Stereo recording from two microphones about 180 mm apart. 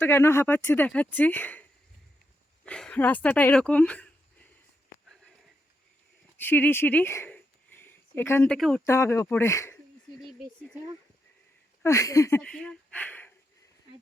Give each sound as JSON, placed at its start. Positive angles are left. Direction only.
{"t": 0.0, "sound": "speech", "side_deg": 15}
{"t": 2.6, "sound": "speech", "side_deg": 5}
{"t": 6.3, "sound": "a sound", "side_deg": 10}
{"t": 8.5, "sound": "speech", "side_deg": 0}
{"t": 8.8, "sound": "speech", "side_deg": 15}
{"t": 11.8, "sound": "speech", "side_deg": 15}
{"t": 12.4, "sound": "speech", "side_deg": 5}